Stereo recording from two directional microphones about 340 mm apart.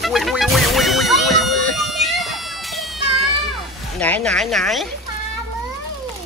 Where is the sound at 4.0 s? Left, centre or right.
Centre.